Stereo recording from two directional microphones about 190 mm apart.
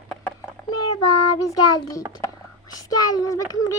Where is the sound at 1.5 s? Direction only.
15° left (ahead or behind).